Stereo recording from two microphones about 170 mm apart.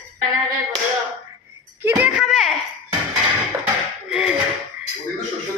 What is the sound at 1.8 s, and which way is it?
Speech, 15° right (ahead or behind).